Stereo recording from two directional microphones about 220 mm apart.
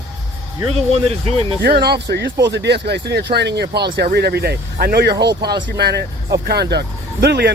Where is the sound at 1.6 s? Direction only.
45° right (ahead or behind).